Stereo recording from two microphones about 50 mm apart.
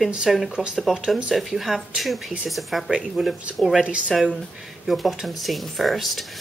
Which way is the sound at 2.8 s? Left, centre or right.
Centre.